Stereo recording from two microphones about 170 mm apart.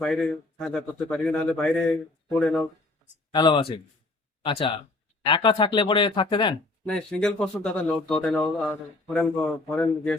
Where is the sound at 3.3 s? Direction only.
30° left (ahead or behind).